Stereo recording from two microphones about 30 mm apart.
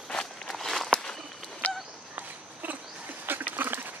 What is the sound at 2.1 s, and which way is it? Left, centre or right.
Walk, right.